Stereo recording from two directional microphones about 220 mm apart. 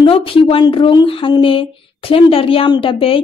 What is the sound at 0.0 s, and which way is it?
Speech, 25° left (ahead or behind).